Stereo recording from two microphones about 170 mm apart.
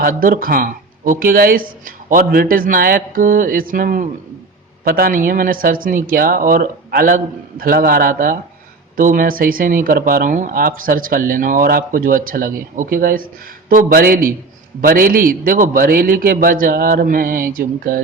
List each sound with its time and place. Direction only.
0.0 s speech: 55° right (ahead or behind)